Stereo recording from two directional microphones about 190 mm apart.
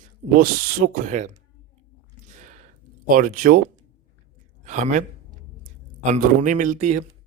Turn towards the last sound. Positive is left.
turn(degrees=-40)  # may be behind; listen again after turning